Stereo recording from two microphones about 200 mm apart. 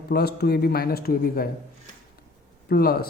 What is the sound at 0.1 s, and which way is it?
Speech, 50° left (ahead or behind).